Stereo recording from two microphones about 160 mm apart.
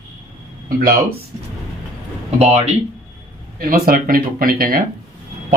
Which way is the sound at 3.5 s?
65° right (ahead or behind).